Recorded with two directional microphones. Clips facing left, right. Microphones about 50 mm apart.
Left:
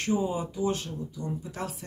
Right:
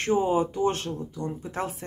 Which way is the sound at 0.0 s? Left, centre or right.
Right.